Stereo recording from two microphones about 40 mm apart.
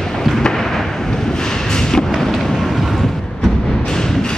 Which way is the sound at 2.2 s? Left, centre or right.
Centre.